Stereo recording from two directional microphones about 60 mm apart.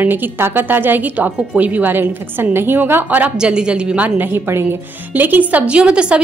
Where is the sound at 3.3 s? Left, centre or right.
Centre.